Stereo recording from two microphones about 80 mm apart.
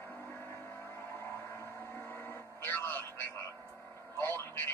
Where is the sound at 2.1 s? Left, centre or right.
Left.